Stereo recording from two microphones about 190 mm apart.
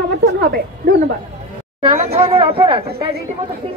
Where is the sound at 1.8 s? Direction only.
30° right (ahead or behind).